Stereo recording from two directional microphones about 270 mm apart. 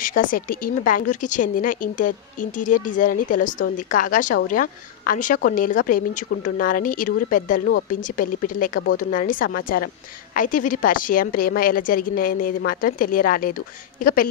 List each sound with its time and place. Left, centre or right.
0.0 s a woman's voice: left